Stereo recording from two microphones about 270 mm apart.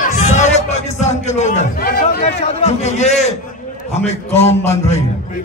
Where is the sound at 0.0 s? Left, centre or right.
Left.